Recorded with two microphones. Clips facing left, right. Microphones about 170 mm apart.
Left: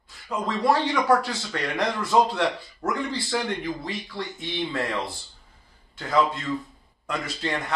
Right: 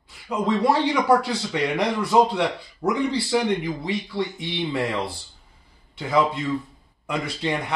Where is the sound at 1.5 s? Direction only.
10° right (ahead or behind).